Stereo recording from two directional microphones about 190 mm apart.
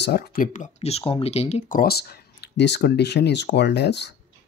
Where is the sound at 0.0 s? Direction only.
55° left (ahead or behind).